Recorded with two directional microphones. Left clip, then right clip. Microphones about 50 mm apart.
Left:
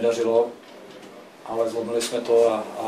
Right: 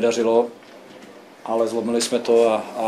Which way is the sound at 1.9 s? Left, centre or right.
Right.